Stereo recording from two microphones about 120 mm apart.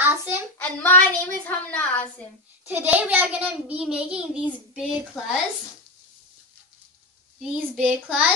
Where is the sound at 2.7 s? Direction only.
15° right (ahead or behind).